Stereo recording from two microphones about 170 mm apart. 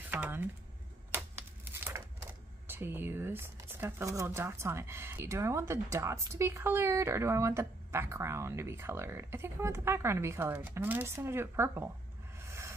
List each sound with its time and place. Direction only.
0.1 s speech: 10° right (ahead or behind)
1.1 s crumpling: 15° right (ahead or behind)
2.6 s speech: 10° right (ahead or behind)
12.4 s music: 15° right (ahead or behind)